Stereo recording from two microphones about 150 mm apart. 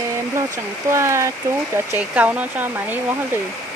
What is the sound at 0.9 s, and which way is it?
Speech, 20° right (ahead or behind).